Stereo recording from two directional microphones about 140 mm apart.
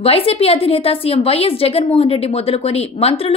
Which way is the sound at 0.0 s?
45° left (ahead or behind).